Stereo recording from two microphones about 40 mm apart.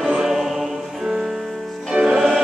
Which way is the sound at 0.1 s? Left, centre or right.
Centre.